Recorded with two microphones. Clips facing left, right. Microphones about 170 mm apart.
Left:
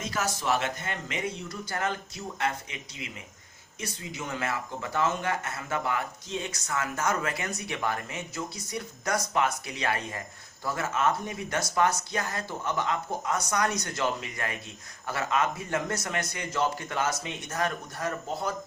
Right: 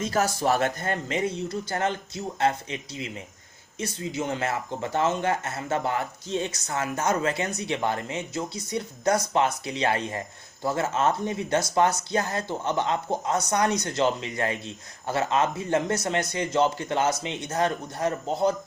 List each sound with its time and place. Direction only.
0.1 s speech: 40° right (ahead or behind)
4.3 s a man's voice: 30° right (ahead or behind)